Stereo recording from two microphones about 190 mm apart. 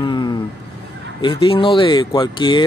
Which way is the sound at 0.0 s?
25° left (ahead or behind).